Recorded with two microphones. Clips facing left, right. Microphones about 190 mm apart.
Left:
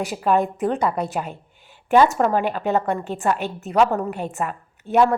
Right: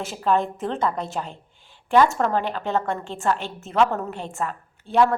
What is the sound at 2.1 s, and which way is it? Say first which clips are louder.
A woman's voice: left 3 dB; 10° left (ahead or behind).